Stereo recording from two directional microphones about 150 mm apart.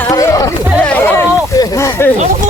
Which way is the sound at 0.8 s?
10° left (ahead or behind).